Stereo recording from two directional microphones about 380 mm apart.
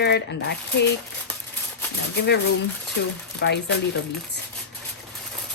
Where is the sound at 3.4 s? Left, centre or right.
Left.